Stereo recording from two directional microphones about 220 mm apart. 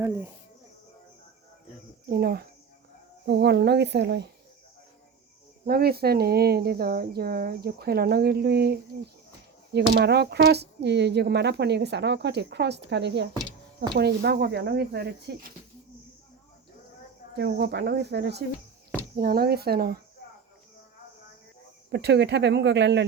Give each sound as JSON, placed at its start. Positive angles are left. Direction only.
{"t": 2.0, "sound": "speech", "side_deg": -45}
{"t": 5.6, "sound": "speech", "side_deg": -45}
{"t": 9.9, "sound": "speech", "side_deg": -50}
{"t": 17.3, "sound": "speech", "side_deg": -50}
{"t": 21.9, "sound": "speech", "side_deg": -50}